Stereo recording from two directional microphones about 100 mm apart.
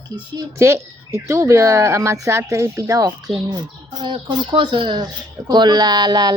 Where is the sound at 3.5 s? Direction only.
45° right (ahead or behind).